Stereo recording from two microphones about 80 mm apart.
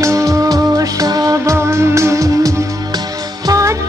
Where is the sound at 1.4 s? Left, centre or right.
Right.